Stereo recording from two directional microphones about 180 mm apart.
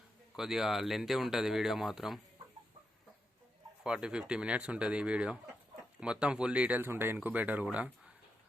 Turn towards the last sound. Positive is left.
turn(degrees=-5)  # may be behind; listen again after turning